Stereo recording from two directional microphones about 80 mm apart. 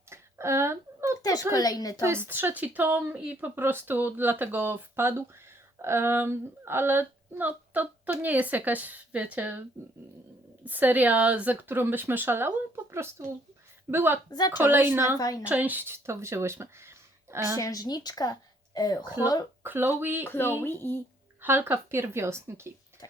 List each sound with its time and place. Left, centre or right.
0.1 s a sound: right
1.2 s a sound: left
1.5 s a woman's voice: left
2.0 s speech: right
14.3 s a woman's voice: left
14.5 s speech: right
15.2 s a woman's voice: left
15.4 s speech: right
17.6 s a woman's voice: left
19.6 s speech: right
20.2 s speech: left
21.4 s speech: right